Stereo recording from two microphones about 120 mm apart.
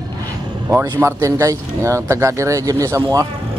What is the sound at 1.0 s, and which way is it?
Speech, 25° right (ahead or behind).